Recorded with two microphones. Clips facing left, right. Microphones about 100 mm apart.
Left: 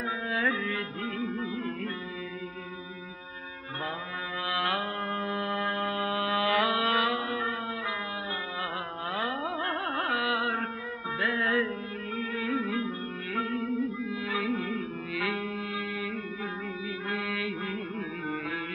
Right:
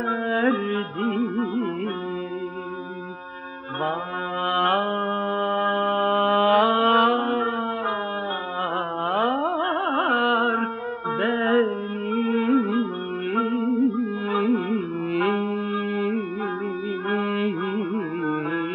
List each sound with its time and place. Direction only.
0.1 s music: 40° right (ahead or behind)
4.5 s mantra: 45° right (ahead or behind)
9.1 s carnatic music: 45° right (ahead or behind)
11.1 s music: 40° right (ahead or behind)
17.1 s carnatic music: 45° right (ahead or behind)